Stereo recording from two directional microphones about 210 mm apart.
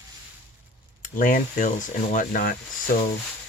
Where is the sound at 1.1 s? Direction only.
40° left (ahead or behind).